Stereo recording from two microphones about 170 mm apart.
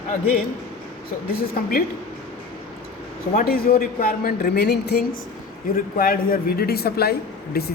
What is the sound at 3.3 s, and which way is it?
A man's voice, 60° left (ahead or behind).